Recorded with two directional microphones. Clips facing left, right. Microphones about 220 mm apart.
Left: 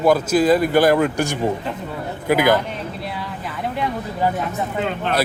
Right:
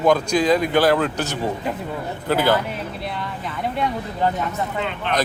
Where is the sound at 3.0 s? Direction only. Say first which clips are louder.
Even; 5° left (ahead or behind).